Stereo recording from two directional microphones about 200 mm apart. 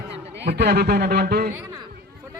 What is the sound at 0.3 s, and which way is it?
A man's voice, 55° right (ahead or behind).